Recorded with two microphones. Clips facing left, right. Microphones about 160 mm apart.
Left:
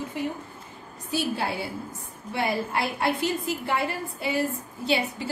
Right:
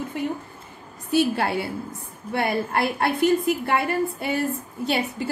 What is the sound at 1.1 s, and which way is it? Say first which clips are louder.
A woman's voice: right 6 dB; 60° right (ahead or behind).